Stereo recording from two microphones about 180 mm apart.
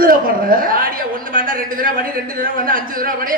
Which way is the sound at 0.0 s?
50° right (ahead or behind).